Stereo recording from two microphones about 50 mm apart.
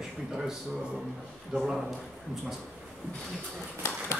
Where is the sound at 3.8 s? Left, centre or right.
Left.